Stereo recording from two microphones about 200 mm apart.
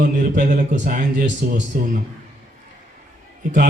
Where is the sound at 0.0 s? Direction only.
40° right (ahead or behind).